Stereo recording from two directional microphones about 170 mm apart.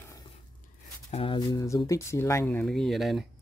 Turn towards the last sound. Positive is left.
turn(degrees=0)  # may be behind; listen again after turning